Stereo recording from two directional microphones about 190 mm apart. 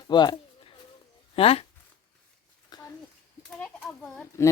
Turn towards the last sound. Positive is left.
turn(degrees=5)  # may be behind; listen again after turning